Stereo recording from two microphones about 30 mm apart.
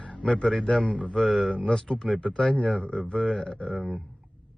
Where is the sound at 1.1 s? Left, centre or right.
Centre.